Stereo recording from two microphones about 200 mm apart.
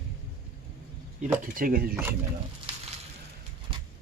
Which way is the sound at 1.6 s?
45° right (ahead or behind).